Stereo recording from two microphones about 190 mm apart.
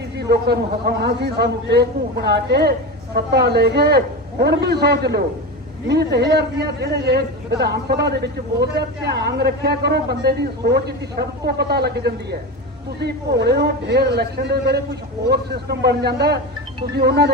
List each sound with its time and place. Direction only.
0.2 s a man's voice: 60° right (ahead or behind)